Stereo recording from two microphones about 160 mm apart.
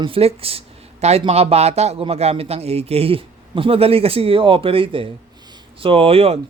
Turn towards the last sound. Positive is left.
turn(degrees=-40)  # may be behind; listen again after turning